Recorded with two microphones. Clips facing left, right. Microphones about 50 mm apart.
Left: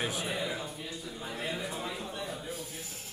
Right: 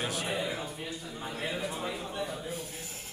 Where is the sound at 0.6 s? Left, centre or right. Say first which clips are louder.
Right 1 dB; right.